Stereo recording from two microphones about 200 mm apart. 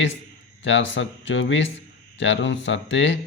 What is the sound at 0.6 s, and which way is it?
Speech, 65° left (ahead or behind).